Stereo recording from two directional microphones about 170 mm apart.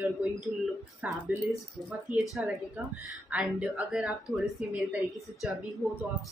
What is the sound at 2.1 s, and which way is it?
Speech, 50° right (ahead or behind).